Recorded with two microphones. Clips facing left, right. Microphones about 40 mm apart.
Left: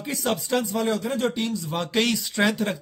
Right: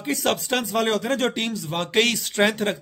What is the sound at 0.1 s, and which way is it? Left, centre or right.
Speech, right.